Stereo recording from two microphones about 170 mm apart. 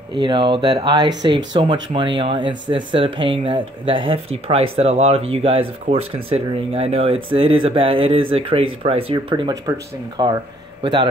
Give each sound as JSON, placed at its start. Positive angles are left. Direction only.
{"t": 0.1, "sound": "a man's voice", "side_deg": -30}